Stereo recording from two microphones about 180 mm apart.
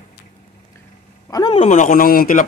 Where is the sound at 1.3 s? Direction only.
20° left (ahead or behind).